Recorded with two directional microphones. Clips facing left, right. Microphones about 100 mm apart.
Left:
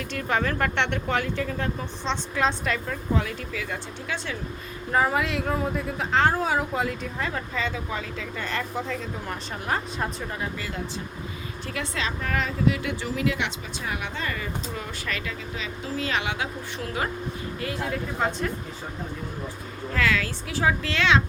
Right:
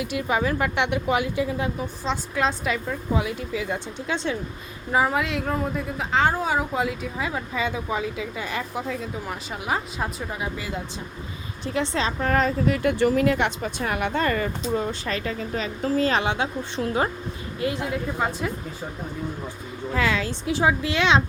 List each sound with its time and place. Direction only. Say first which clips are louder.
0.0 s speech: right 2 dB; 10° right (ahead or behind)
4.9 s a woman's voice: right 1 dB; 5° right (ahead or behind)
11.6 s a woman's voice: right 6 dB; 25° right (ahead or behind); by 14.5 s 50° right (ahead or behind)
14.8 s a woman's voice: right 6 dB; 30° right (ahead or behind)
18.2 s a woman's voice: left 1 dB; 5° right (ahead or behind)
19.9 s speech: right 1 dB; 20° right (ahead or behind)